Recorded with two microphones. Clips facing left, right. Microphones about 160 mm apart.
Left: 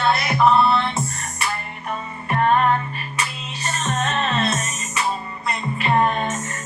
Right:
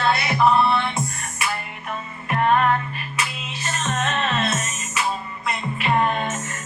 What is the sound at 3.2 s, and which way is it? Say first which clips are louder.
Music: left 1 dB; 35° left (ahead or behind).